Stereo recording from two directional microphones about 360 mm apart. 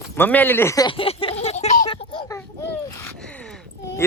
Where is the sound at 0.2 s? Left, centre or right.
Centre.